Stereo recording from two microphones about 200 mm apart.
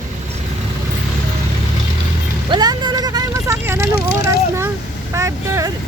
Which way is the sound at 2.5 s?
20° right (ahead or behind).